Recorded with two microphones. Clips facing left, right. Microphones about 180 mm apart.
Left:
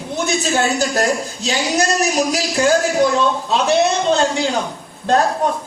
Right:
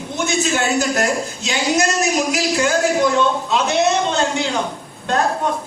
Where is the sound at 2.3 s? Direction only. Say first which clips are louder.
Left 2 dB; 35° left (ahead or behind).